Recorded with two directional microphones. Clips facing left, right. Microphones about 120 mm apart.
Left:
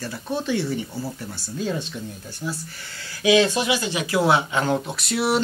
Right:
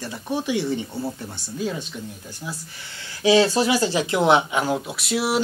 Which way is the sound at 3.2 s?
30° right (ahead or behind).